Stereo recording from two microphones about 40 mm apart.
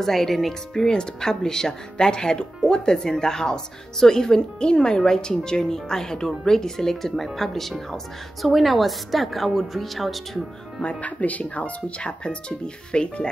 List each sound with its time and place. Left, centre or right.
0.0 s a woman's voice: centre
10.8 s speech: left